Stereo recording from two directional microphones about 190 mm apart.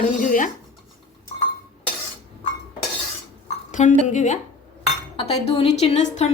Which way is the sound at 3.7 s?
40° left (ahead or behind).